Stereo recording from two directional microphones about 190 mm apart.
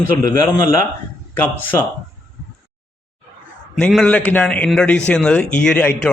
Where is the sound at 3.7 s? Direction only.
5° left (ahead or behind).